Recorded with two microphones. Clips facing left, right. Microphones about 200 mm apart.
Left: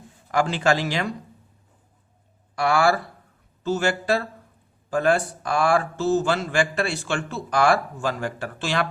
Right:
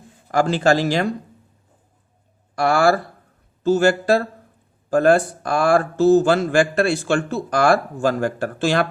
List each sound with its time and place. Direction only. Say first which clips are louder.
0.3 s speech: right 4 dB; 40° right (ahead or behind)
2.6 s speech: right 4 dB; 45° right (ahead or behind)